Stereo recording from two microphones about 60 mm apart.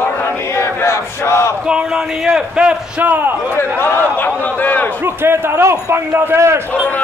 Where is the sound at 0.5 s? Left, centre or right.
Left.